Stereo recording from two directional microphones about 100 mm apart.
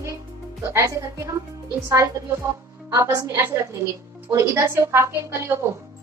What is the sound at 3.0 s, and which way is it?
A woman's voice, 30° right (ahead or behind).